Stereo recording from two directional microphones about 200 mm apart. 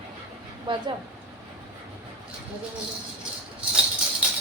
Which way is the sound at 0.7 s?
25° right (ahead or behind).